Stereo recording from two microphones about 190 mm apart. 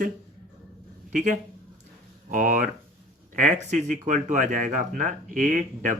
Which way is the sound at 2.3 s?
45° right (ahead or behind).